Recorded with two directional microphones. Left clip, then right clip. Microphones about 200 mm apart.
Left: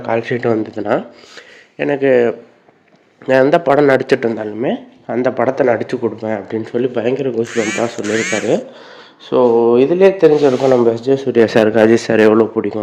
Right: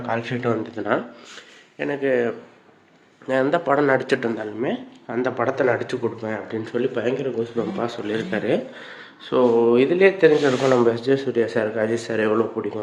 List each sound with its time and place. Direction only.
0.0 s speech: 40° left (ahead or behind)
9.2 s a man's voice: 20° left (ahead or behind)
11.3 s speech: 50° left (ahead or behind)